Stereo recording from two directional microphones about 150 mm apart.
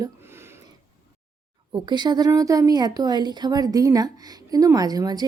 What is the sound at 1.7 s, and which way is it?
A woman's voice, 30° right (ahead or behind).